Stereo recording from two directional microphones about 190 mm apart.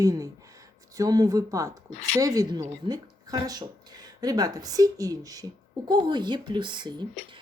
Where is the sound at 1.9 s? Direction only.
35° left (ahead or behind).